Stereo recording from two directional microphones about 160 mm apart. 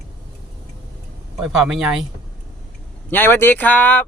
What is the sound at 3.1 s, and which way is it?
Speech, 15° left (ahead or behind).